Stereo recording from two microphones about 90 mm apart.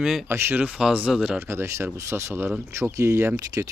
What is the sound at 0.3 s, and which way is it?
Speech, 30° right (ahead or behind).